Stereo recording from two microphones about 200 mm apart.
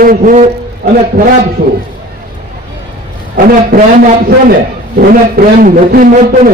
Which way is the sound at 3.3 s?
45° right (ahead or behind).